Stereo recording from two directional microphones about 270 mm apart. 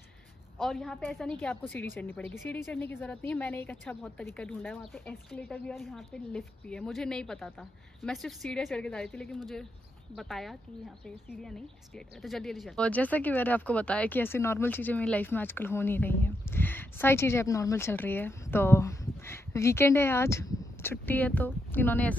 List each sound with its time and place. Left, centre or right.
0.6 s a woman's voice: centre
12.2 s speech: centre